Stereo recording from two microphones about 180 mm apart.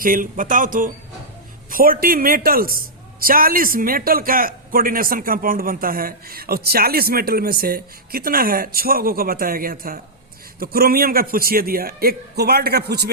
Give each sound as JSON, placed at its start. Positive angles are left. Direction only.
{"t": 0.0, "sound": "a man's voice", "side_deg": -50}